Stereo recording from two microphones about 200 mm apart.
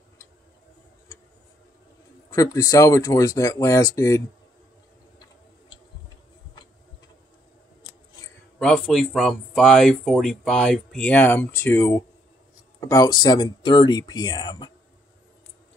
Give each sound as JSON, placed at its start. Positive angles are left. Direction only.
{"t": 2.3, "sound": "speech", "side_deg": 15}
{"t": 8.5, "sound": "speech", "side_deg": 5}